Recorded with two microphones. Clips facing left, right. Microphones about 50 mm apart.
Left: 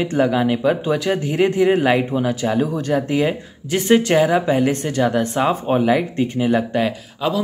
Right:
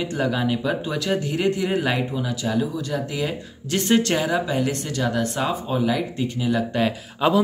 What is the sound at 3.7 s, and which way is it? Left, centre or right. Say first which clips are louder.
Speech: left 5 dB; centre.